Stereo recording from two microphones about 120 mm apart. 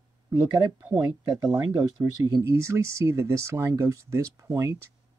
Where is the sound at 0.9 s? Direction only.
35° right (ahead or behind).